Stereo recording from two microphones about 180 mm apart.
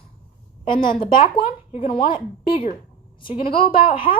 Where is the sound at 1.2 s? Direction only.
30° left (ahead or behind).